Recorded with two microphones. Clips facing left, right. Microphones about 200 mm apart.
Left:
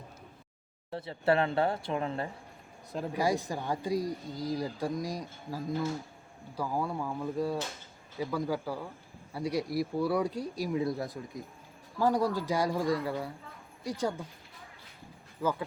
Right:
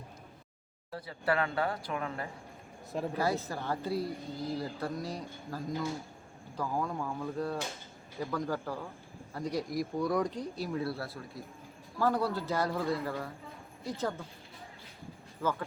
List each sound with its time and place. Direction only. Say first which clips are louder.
0.9 s speech: left 4 dB; 25° left (ahead or behind)
3.1 s speech: left 3 dB; 15° left (ahead or behind)
15.4 s speech: left 2 dB; 10° left (ahead or behind)